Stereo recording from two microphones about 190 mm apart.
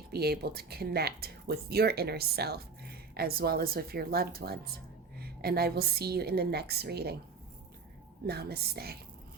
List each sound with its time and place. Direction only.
0.1 s speech: 55° right (ahead or behind)
8.3 s speech: 55° right (ahead or behind)